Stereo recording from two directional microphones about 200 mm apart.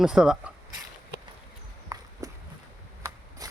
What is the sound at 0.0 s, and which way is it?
Speech, 5° right (ahead or behind).